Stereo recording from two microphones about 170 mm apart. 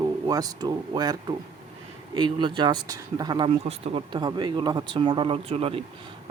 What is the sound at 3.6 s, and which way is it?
A man's voice, 35° right (ahead or behind).